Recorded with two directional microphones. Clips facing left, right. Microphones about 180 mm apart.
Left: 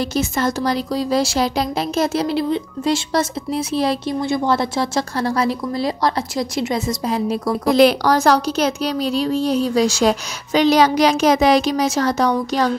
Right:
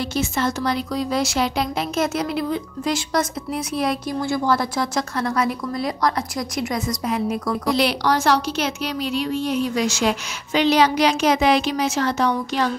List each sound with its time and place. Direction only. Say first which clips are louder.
0.1 s speech: left 3 dB; 40° left (ahead or behind)
7.6 s a woman's voice: left 8 dB; 45° left (ahead or behind)